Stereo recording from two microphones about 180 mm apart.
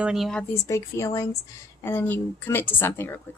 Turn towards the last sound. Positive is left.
turn(degrees=10)  # may be behind; listen again after turning